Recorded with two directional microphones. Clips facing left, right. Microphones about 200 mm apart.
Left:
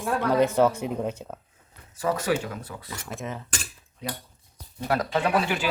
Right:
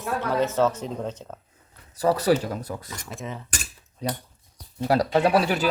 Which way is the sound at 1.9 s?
35° right (ahead or behind).